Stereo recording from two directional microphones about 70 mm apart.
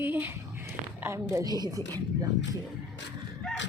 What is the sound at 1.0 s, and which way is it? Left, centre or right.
Speech, right.